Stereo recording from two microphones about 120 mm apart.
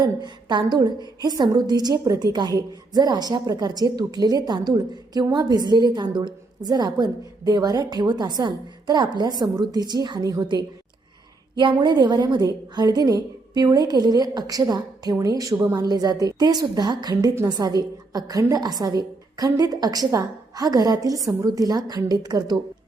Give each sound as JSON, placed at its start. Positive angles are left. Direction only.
{"t": 0.0, "sound": "a woman's voice", "side_deg": -35}